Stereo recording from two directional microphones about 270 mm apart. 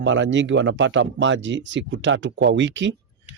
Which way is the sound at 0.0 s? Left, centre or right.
Right.